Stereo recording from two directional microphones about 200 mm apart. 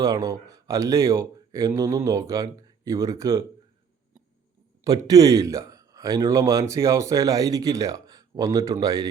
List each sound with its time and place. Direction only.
0.0 s speech: 20° right (ahead or behind)
4.8 s speech: 20° right (ahead or behind)